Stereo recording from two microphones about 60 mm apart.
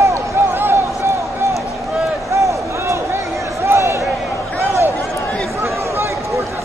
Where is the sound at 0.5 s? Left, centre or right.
Right.